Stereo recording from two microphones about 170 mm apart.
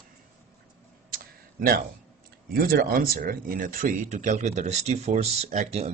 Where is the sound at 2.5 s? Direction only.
60° right (ahead or behind).